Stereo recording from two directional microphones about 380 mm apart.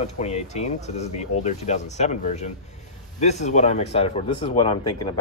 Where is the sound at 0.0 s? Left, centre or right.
Centre.